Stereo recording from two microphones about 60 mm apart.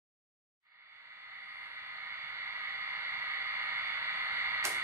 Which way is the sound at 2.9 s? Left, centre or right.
Right.